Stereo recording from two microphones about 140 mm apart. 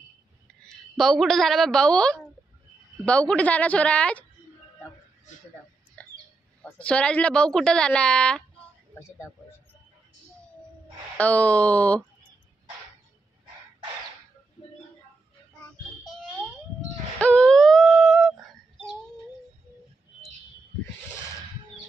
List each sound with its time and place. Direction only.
0.5 s a woman's voice: 5° left (ahead or behind)
6.0 s bird: 10° left (ahead or behind)
6.6 s a woman's voice: 10° left (ahead or behind)
11.1 s a woman's voice: 10° left (ahead or behind)
17.2 s a sound: 5° left (ahead or behind)